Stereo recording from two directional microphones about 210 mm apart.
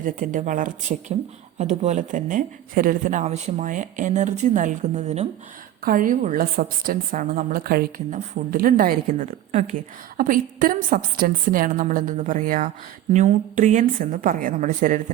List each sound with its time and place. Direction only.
0.0 s a woman's voice: 40° right (ahead or behind)